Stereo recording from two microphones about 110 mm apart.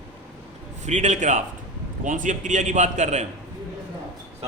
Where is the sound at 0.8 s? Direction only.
90° right.